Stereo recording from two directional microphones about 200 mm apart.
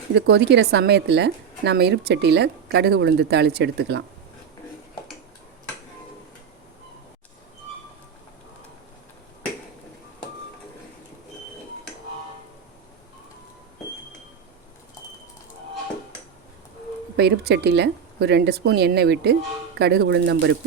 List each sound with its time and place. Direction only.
0.1 s a woman's voice: 55° right (ahead or behind)
17.2 s a woman's voice: 55° right (ahead or behind)